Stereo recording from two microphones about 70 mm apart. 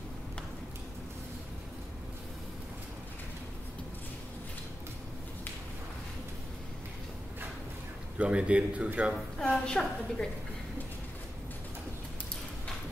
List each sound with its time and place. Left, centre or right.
8.2 s speech: centre
9.5 s a woman's voice: centre